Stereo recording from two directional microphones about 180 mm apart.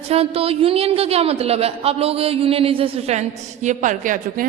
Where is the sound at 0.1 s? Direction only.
35° right (ahead or behind).